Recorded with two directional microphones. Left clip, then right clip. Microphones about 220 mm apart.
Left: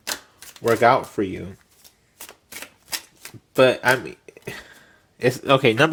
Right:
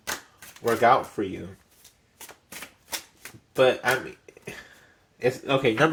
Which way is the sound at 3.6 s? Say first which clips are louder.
Left 5 dB; 45° left (ahead or behind).